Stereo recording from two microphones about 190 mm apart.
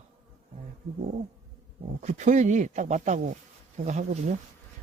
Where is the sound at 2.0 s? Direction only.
40° right (ahead or behind).